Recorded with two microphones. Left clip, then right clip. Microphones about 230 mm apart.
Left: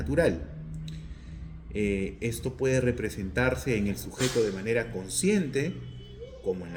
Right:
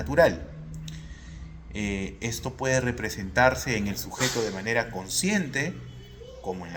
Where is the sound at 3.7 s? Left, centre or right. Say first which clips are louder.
Even; right.